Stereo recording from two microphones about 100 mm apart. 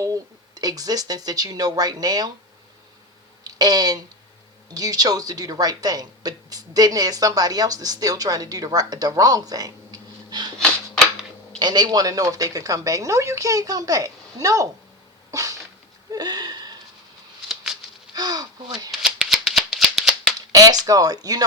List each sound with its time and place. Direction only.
0.0 s speech: 35° right (ahead or behind)
3.4 s a sound: 40° right (ahead or behind)
4.7 s speech: 40° right (ahead or behind)
11.6 s speech: 45° right (ahead or behind)
15.3 s a sound: 35° right (ahead or behind)
17.5 s patter: 5° right (ahead or behind)
18.1 s a sound: 40° right (ahead or behind)
18.9 s shuffling cards: 5° right (ahead or behind)
20.5 s speech: 40° right (ahead or behind)